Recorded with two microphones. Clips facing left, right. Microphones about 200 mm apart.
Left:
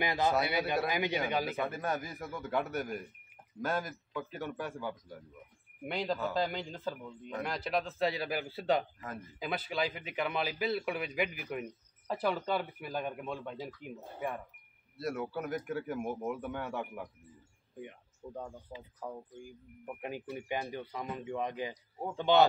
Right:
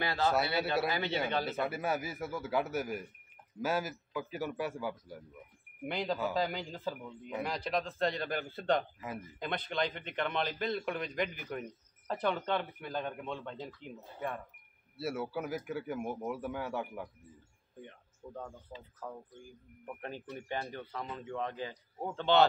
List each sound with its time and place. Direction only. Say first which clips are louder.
0.0 s a man's voice: left 1 dB; 15° left (ahead or behind)
1.6 s a man's voice: right 1 dB; 5° right (ahead or behind); by 14.4 s 10° left (ahead or behind)
15.0 s speech: even; 5° right (ahead or behind)
17.7 s a man's voice: left 4 dB; 10° left (ahead or behind)